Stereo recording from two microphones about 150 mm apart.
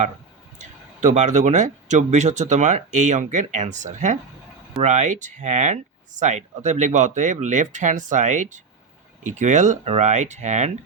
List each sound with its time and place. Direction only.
0.6 s speech: 55° right (ahead or behind)